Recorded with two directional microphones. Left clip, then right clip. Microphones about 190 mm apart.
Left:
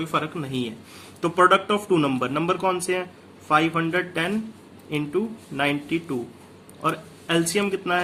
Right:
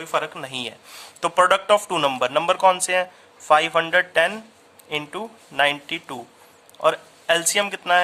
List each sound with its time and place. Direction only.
0.0 s speech: 45° right (ahead or behind)